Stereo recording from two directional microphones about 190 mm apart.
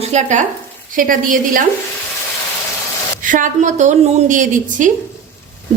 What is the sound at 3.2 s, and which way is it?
A woman's voice, 45° right (ahead or behind).